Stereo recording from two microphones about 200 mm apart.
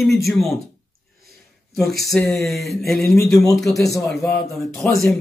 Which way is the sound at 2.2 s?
Centre (ahead or behind).